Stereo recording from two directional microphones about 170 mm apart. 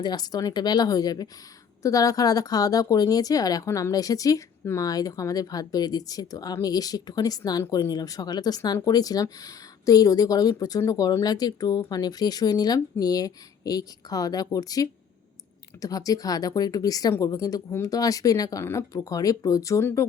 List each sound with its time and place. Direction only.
0.0 s speech: 25° left (ahead or behind)